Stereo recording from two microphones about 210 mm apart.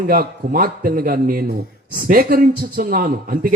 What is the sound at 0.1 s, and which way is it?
A man's voice, 40° right (ahead or behind).